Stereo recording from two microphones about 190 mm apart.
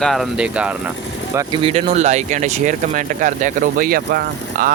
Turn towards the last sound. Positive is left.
turn(degrees=-55)  # may be behind; listen again after turning